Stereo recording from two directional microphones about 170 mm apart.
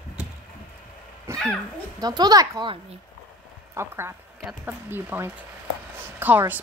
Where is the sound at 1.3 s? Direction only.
15° right (ahead or behind).